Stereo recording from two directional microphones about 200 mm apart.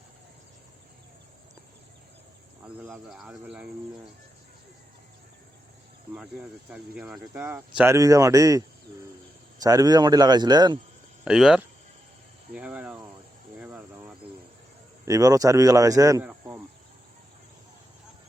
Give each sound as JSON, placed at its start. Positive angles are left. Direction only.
{"t": 2.6, "sound": "speech", "side_deg": -10}
{"t": 6.7, "sound": "speech", "side_deg": -5}
{"t": 9.6, "sound": "a man's voice", "side_deg": -20}
{"t": 11.3, "sound": "speech", "side_deg": -5}
{"t": 13.6, "sound": "cricket", "side_deg": -5}
{"t": 15.0, "sound": "speech", "side_deg": -15}